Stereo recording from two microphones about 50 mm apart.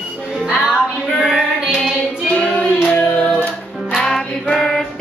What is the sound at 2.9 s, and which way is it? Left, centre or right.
Singing, left.